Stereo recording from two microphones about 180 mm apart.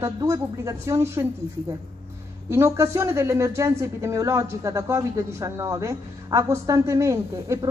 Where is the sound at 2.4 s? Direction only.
15° right (ahead or behind).